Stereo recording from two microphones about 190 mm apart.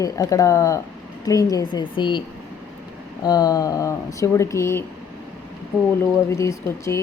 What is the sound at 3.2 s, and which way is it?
Speech, 20° left (ahead or behind).